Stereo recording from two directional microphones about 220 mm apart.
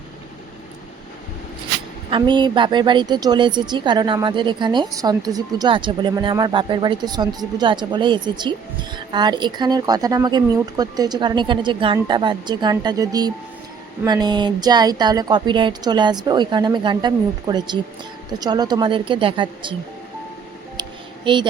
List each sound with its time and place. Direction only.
2.0 s a woman's voice: 20° right (ahead or behind)
21.3 s a woman's voice: 20° right (ahead or behind)